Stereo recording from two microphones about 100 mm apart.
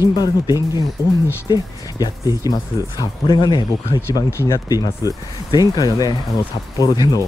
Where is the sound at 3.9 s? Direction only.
25° left (ahead or behind); by 7.1 s 45° left (ahead or behind).